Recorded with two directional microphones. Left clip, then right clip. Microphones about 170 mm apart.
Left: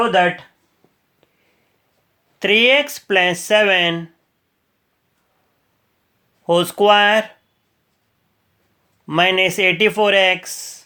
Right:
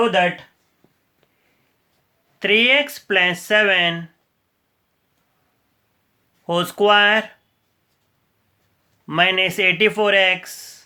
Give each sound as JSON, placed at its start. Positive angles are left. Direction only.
{"t": 0.0, "sound": "speech", "side_deg": 20}
{"t": 2.4, "sound": "speech", "side_deg": 30}
{"t": 6.4, "sound": "speech", "side_deg": 25}
{"t": 9.0, "sound": "speech", "side_deg": 30}